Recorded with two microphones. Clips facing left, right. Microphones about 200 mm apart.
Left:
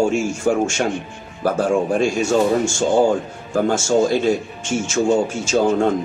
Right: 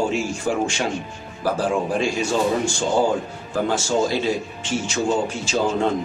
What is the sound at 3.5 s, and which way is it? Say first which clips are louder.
Speech: left 4 dB; 45° left (ahead or behind).